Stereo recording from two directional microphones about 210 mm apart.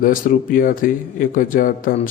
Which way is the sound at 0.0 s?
40° left (ahead or behind).